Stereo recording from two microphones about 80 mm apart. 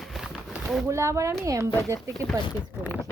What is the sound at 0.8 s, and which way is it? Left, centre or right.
Speech, right.